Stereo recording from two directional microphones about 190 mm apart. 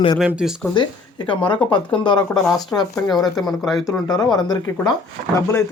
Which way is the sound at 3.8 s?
20° left (ahead or behind).